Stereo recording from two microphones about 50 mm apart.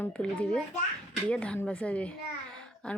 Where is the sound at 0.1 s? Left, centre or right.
Left.